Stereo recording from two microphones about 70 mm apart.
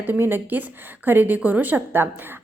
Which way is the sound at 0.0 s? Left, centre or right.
Right.